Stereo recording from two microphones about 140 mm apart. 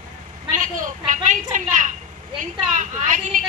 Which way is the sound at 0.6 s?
65° right (ahead or behind).